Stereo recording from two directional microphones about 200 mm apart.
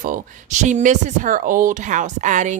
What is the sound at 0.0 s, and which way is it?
Speech, 40° right (ahead or behind).